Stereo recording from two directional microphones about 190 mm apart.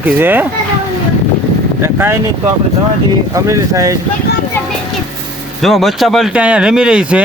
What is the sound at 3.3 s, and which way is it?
Speech, 15° right (ahead or behind).